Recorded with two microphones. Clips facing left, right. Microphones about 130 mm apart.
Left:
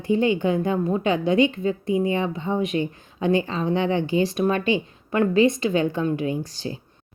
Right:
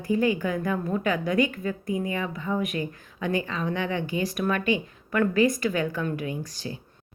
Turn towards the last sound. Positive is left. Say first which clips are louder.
# left 5 dB
turn(degrees=30)  # may be behind; listen again after turning